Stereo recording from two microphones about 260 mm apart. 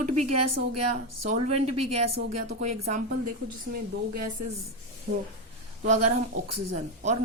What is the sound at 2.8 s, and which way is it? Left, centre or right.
A woman's voice, right.